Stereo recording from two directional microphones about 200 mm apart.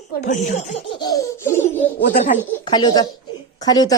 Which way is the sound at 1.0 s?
15° left (ahead or behind).